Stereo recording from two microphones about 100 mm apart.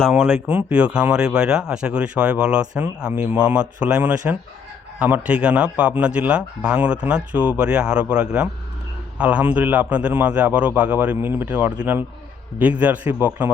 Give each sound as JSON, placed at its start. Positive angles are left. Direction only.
{"t": 0.1, "sound": "speech", "side_deg": -5}